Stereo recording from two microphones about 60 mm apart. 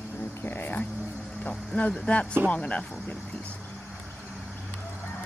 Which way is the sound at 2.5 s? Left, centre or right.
Left.